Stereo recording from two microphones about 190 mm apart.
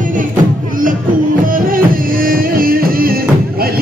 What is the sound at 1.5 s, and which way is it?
Music, 50° right (ahead or behind).